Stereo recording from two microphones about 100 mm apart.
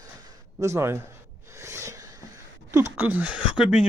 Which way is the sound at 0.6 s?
30° right (ahead or behind).